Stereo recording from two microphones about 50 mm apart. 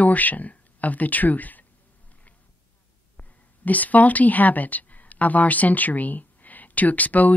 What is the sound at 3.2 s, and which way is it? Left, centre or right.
Speech, left.